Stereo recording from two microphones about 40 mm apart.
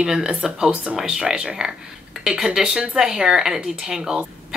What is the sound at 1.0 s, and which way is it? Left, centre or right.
Speech, centre.